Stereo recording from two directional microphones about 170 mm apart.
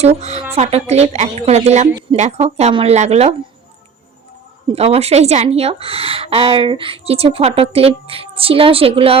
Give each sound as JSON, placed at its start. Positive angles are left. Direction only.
{"t": 0.0, "sound": "a woman's voice", "side_deg": -40}
{"t": 4.7, "sound": "a woman's voice", "side_deg": -35}